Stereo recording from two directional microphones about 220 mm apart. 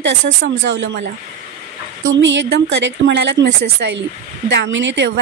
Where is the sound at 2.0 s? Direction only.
60° right (ahead or behind).